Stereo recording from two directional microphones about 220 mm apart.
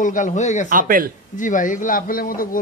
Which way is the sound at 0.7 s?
40° right (ahead or behind).